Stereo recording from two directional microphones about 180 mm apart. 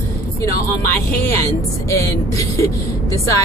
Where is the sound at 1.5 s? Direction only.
15° left (ahead or behind).